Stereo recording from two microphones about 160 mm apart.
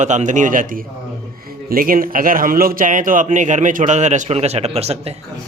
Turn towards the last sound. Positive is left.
turn(degrees=-40)  # may be behind; listen again after turning